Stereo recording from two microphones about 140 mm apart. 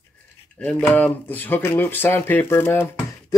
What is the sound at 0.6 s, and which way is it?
Speech, 10° left (ahead or behind).